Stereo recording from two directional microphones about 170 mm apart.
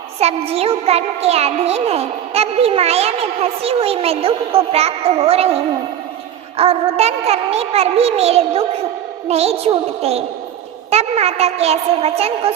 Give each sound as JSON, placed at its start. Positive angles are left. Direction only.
{"t": 0.2, "sound": "speech", "side_deg": -35}
{"t": 6.6, "sound": "speech", "side_deg": -35}